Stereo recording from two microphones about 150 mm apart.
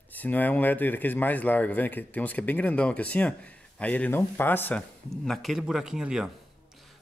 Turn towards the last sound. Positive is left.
turn(degrees=-5)  # may be behind; listen again after turning